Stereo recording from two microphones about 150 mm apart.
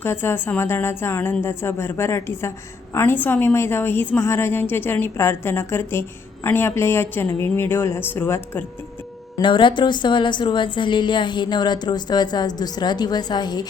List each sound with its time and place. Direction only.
0.0 s a woman's voice: 15° left (ahead or behind)
9.4 s a woman's voice: 30° left (ahead or behind)